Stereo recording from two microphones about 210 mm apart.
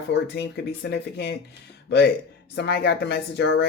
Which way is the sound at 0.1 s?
55° left (ahead or behind).